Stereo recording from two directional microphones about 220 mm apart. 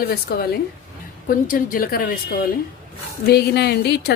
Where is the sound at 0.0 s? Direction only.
45° left (ahead or behind).